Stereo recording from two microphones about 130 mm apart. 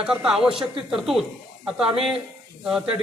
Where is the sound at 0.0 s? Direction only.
5° right (ahead or behind).